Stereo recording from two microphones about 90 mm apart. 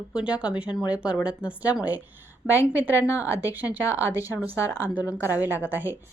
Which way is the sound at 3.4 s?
20° right (ahead or behind).